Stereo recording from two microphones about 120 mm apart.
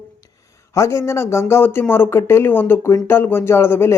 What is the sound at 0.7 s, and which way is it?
A man's voice, 25° left (ahead or behind).